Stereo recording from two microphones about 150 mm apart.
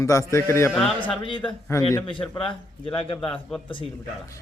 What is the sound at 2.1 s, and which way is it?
Speech, 35° left (ahead or behind).